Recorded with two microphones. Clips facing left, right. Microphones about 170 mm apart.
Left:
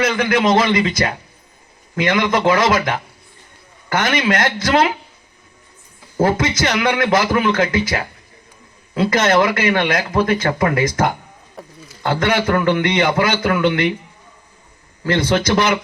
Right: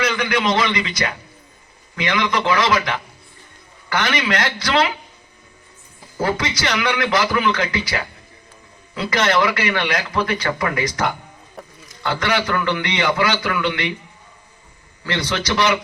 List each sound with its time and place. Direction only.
0.0 s a man's voice: 50° left (ahead or behind)
6.1 s a man's voice: 45° left (ahead or behind)
15.0 s a man's voice: 50° left (ahead or behind)